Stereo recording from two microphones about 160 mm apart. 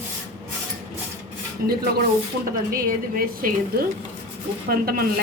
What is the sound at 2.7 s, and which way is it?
Speech, 65° right (ahead or behind).